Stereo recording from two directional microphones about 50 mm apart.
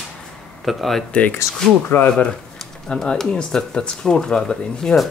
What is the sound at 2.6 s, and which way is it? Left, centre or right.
Speech, centre.